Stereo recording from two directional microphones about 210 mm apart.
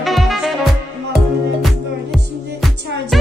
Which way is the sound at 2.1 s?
Centre (ahead or behind).